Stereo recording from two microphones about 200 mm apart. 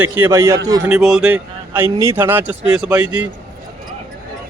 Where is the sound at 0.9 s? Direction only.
5° right (ahead or behind).